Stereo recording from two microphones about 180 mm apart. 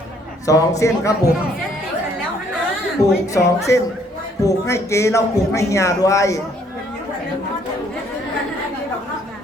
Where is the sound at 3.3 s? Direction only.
15° left (ahead or behind).